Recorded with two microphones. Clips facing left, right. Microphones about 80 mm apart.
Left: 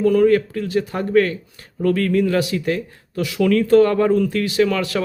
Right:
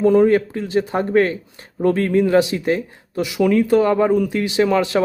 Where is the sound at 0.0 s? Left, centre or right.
Right.